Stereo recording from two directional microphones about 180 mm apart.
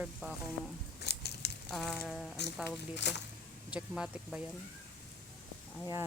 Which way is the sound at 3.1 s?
70° left (ahead or behind).